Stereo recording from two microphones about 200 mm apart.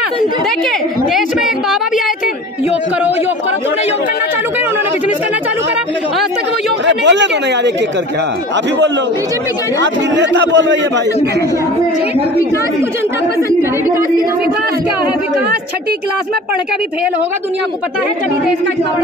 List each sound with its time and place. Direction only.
6.9 s speech: 60° right (ahead or behind)
9.8 s speech: 60° right (ahead or behind)
13.5 s a woman's voice: 15° right (ahead or behind)